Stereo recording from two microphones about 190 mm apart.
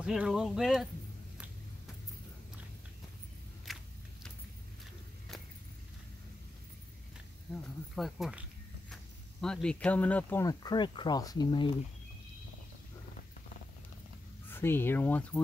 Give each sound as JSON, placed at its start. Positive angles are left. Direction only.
{"t": 0.0, "sound": "speech", "side_deg": -5}
{"t": 3.6, "sound": "a sound", "side_deg": 0}
{"t": 7.9, "sound": "speech", "side_deg": 0}
{"t": 14.5, "sound": "speech", "side_deg": 10}